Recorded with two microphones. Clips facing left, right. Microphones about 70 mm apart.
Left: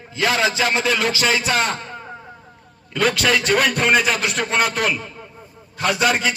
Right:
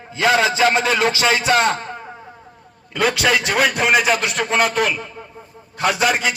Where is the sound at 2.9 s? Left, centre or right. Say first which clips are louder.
Right 1 dB; centre.